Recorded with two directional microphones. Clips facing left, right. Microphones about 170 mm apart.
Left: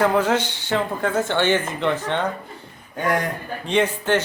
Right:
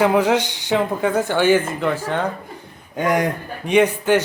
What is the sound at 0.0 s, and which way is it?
A man's voice, 10° right (ahead or behind).